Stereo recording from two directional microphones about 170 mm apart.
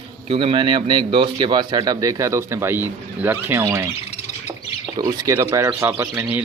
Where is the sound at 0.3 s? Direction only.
30° right (ahead or behind); by 3.8 s 15° right (ahead or behind).